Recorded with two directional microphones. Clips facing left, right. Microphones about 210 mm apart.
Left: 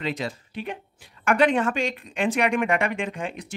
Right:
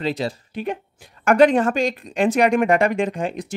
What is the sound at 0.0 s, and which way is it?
Speech, 35° right (ahead or behind).